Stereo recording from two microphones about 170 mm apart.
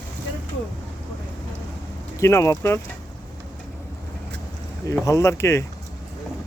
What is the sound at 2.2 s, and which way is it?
Speech, 15° left (ahead or behind).